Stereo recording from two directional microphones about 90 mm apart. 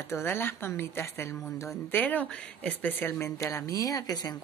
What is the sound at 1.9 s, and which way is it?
Speech, 20° left (ahead or behind).